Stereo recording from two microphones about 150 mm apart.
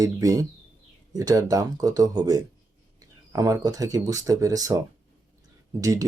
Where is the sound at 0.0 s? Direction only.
25° right (ahead or behind).